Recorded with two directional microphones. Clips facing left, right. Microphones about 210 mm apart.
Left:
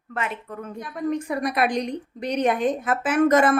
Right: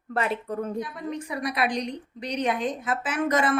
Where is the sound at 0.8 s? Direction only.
50° left (ahead or behind).